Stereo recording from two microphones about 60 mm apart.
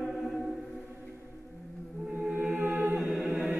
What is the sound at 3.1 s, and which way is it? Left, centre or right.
Music, right.